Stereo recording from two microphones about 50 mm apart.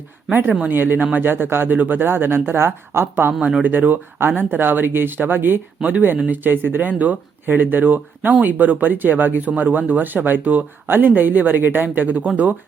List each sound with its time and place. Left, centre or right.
0.7 s speech: right
3.6 s speech: right